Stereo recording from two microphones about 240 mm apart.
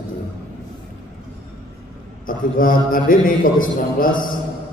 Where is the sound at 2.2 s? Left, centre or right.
Left.